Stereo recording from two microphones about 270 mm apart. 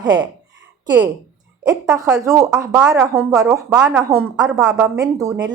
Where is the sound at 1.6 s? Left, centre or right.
Centre.